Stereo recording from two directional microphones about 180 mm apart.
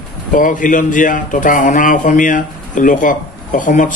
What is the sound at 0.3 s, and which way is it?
Speech, 45° left (ahead or behind).